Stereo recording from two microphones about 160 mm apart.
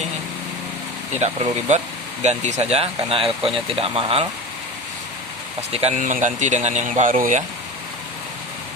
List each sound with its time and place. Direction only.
1.1 s speech: 45° right (ahead or behind)
5.7 s speech: 45° right (ahead or behind)